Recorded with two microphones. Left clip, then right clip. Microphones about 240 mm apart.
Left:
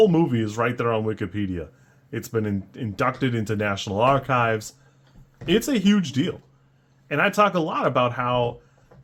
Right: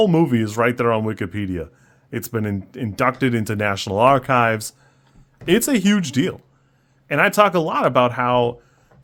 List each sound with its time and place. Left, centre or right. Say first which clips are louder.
0.0 s speech: right 2 dB; right